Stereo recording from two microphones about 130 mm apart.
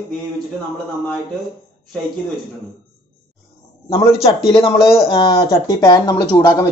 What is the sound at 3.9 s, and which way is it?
A man's voice, 45° left (ahead or behind).